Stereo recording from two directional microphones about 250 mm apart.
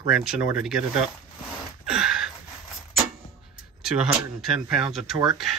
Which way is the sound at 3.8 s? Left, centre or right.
Centre.